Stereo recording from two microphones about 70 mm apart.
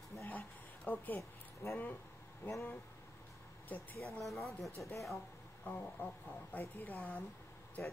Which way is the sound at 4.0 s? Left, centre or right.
Centre.